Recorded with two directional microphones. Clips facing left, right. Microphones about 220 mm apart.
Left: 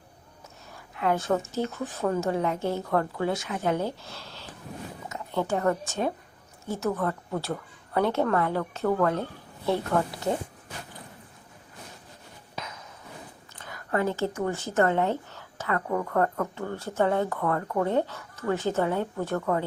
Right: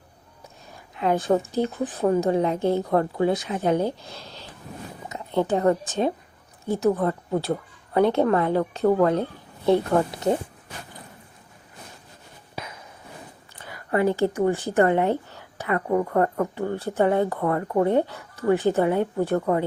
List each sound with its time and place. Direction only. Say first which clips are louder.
0.7 s a sound: right 3 dB; 20° right (ahead or behind)
1.5 s a woman's voice: right 5 dB; 15° right (ahead or behind)
13.6 s a woman's voice: right 5 dB; 10° right (ahead or behind)